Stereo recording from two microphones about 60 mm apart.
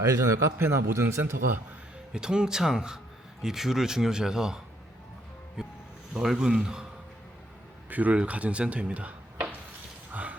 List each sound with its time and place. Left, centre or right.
0.0 s a man's voice: right
0.6 s a man's voice: right
2.1 s speech: centre
7.9 s speech: right
10.1 s mechanisms: right